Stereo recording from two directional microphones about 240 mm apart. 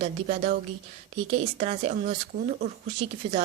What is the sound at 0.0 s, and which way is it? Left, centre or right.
A woman's voice, right.